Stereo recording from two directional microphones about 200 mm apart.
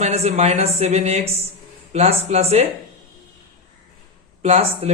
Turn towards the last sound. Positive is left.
turn(degrees=-30)  # may be behind; listen again after turning